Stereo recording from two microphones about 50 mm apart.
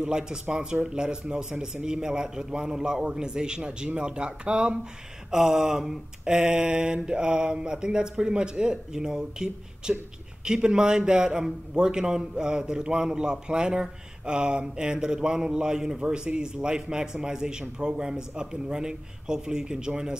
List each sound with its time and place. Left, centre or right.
0.0 s a man's voice: centre
5.3 s a man's voice: centre